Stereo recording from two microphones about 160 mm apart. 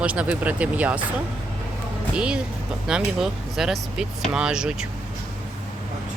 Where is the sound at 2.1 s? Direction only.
5° right (ahead or behind).